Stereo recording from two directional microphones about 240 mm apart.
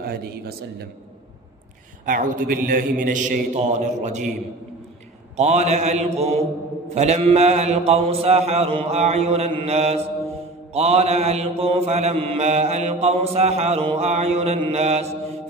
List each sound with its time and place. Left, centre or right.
0.0 s a man's voice: right
2.0 s a man's voice: right
5.4 s mantra: right